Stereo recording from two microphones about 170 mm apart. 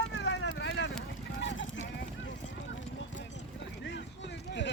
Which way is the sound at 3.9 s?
90° left.